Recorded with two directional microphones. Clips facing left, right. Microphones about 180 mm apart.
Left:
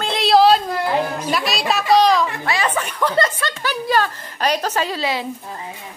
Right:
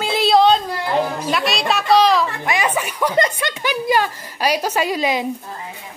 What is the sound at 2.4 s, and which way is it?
Speech, 15° right (ahead or behind).